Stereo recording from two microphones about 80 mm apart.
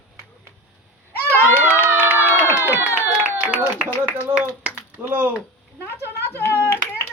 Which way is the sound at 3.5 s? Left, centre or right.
Centre.